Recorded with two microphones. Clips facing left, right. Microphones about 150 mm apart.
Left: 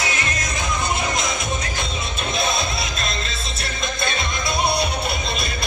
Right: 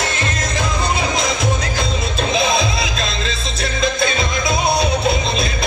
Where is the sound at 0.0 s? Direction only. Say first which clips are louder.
Right 4 dB; 60° right (ahead or behind); by 3.3 s 90° right.